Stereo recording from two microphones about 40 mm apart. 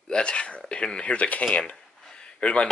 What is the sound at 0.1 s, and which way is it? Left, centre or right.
Speech, left.